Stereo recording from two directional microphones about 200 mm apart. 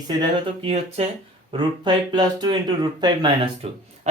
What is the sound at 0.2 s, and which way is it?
Speech, 30° right (ahead or behind).